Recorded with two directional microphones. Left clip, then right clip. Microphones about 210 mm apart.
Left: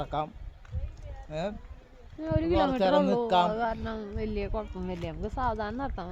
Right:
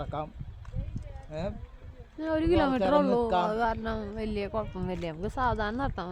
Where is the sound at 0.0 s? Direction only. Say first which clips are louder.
Left 3 dB; 55° left (ahead or behind).